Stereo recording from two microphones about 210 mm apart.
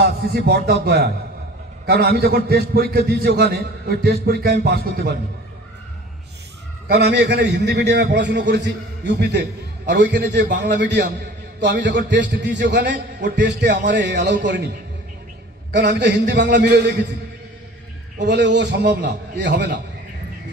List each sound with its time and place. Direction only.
0.0 s a man's voice: 45° right (ahead or behind)
6.9 s a man's voice: 50° right (ahead or behind)
15.7 s a man's voice: 55° right (ahead or behind)
18.2 s a man's voice: 55° right (ahead or behind)